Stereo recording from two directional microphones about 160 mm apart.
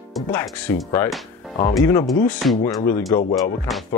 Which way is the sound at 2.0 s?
5° left (ahead or behind).